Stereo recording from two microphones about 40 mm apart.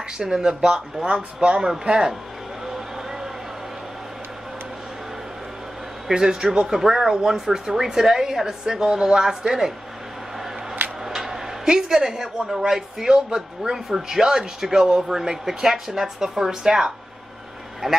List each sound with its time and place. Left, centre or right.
0.2 s speech: centre
1.0 s speech: right
1.9 s speech: centre
2.6 s a sound: centre
6.0 s speech: centre
6.7 s speech: centre
11.1 s speech: centre